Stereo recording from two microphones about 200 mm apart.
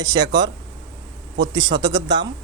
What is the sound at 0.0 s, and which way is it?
Speech, 20° right (ahead or behind).